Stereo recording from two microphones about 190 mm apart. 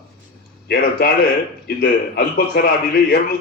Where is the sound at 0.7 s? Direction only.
55° left (ahead or behind).